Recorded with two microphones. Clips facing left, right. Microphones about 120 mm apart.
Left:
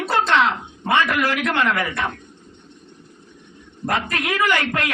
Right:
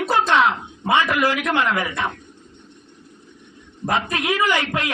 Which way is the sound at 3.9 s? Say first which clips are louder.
Right 1 dB; 15° right (ahead or behind).